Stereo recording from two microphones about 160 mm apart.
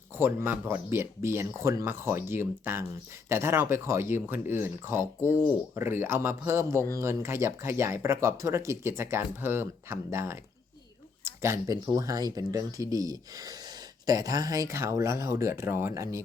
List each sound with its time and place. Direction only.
0.2 s speech: 15° right (ahead or behind)
5.2 s speech: 15° left (ahead or behind)
5.7 s speech: 15° right (ahead or behind)